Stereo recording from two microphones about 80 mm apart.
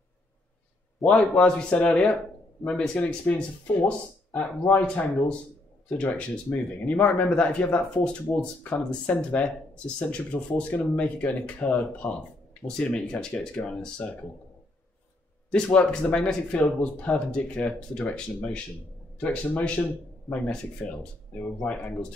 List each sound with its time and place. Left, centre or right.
1.0 s speech: centre
15.5 s speech: centre